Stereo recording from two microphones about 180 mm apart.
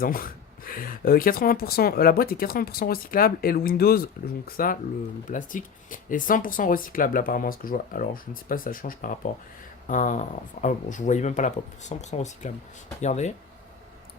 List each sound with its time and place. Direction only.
0.0 s speech: 50° left (ahead or behind)